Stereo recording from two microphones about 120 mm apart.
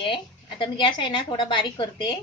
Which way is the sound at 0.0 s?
45° left (ahead or behind).